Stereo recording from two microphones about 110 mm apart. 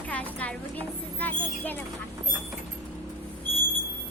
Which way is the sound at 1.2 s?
15° left (ahead or behind).